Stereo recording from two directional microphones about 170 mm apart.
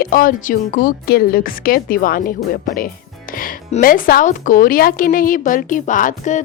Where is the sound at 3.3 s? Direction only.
55° left (ahead or behind).